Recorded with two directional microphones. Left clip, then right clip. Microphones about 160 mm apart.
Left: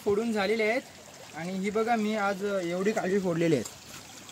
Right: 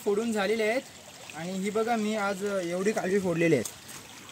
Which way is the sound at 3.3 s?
20° right (ahead or behind).